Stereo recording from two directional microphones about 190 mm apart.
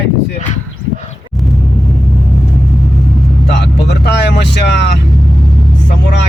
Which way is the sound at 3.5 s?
65° left (ahead or behind).